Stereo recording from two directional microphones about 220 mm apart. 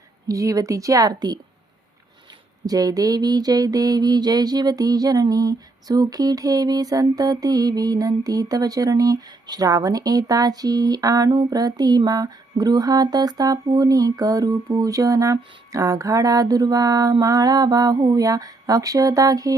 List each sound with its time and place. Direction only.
0.3 s mantra: 15° right (ahead or behind)
2.6 s mantra: 15° right (ahead or behind)